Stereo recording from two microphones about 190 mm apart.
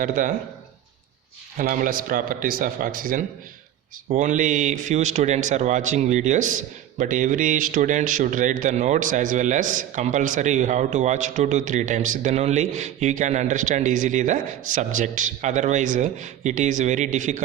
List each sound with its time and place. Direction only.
0.0 s speech: 45° right (ahead or behind)
1.5 s a man's voice: 45° right (ahead or behind)